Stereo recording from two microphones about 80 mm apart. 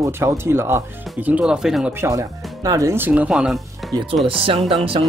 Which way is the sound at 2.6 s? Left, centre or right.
Right.